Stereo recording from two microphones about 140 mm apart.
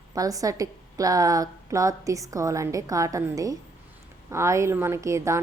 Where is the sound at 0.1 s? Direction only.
25° right (ahead or behind).